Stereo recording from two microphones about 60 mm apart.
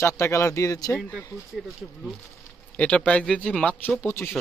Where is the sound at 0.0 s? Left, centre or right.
Left.